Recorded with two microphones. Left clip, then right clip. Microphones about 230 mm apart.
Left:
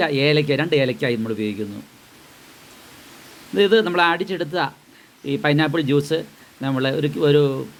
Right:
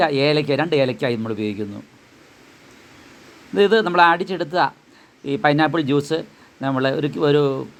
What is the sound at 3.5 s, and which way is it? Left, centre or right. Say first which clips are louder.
A man's voice: right 1 dB; centre.